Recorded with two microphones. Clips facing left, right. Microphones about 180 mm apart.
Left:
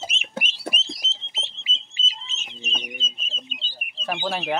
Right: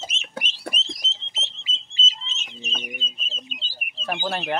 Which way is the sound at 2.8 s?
5° right (ahead or behind).